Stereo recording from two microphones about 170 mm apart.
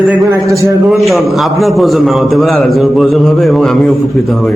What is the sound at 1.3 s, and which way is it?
A man's voice, centre (ahead or behind).